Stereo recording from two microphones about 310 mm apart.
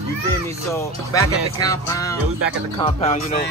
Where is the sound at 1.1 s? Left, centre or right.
Centre.